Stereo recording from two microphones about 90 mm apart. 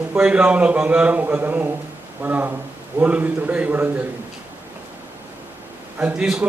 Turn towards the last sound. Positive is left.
turn(degrees=-10)  # may be behind; listen again after turning